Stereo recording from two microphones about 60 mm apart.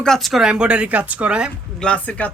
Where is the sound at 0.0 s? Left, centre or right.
Centre; by 1.5 s right.